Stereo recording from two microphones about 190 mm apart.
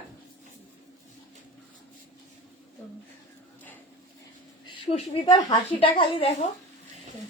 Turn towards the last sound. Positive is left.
turn(degrees=30)  # may be behind; listen again after turning